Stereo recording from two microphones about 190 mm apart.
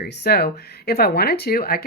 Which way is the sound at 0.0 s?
60° left (ahead or behind).